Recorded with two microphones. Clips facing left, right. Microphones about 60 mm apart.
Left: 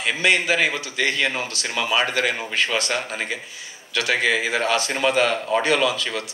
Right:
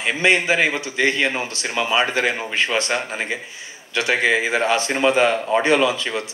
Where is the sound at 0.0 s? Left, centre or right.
Right.